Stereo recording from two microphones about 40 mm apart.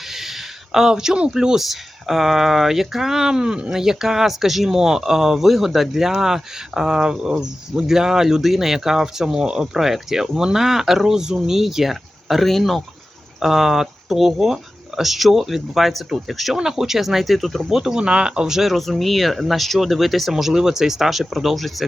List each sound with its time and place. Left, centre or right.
0.1 s a sound: centre
1.3 s speech: centre
1.6 s speech: centre
13.4 s speech: centre
16.6 s speech: centre
17.6 s speech: centre
18.0 s speech: right
18.5 s speech: centre